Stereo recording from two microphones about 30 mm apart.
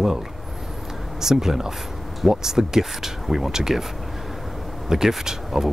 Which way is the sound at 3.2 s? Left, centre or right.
Centre.